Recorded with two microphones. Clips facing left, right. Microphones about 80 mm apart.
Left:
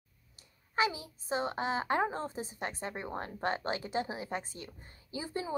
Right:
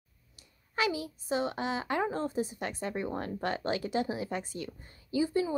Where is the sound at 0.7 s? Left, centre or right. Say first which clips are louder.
Right 1 dB; left.